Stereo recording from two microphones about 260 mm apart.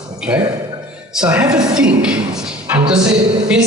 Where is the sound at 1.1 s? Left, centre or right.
Centre.